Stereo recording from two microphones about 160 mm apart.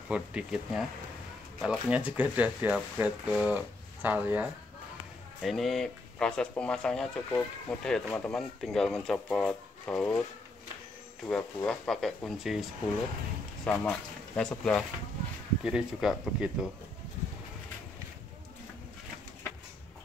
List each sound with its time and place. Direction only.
0.1 s speech: 5° right (ahead or behind)
5.4 s speech: centre (ahead or behind)
11.2 s speech: 5° left (ahead or behind)
13.7 s speech: 5° left (ahead or behind)